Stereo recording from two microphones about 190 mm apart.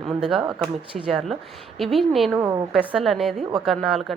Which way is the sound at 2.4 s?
15° right (ahead or behind).